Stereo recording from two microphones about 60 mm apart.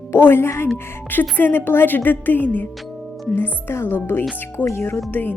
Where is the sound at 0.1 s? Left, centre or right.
Left.